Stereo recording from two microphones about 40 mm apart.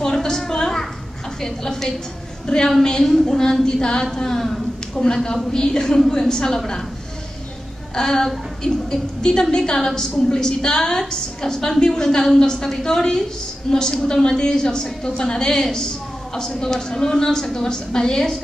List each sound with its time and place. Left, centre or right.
0.0 s a sound: centre
1.4 s a woman's voice: centre
3.0 s a woman's voice: centre
7.9 s a woman's voice: centre